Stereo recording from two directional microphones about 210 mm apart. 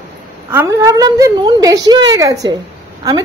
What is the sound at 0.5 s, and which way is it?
A woman's voice, 15° right (ahead or behind).